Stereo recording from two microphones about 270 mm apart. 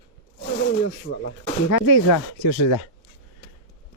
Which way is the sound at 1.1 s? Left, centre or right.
Left.